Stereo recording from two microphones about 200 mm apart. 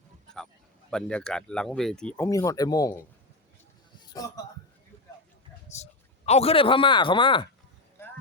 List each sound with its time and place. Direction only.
0.9 s speech: 5° left (ahead or behind)
4.2 s a man's voice: 15° left (ahead or behind)
5.6 s a man's voice: 35° left (ahead or behind)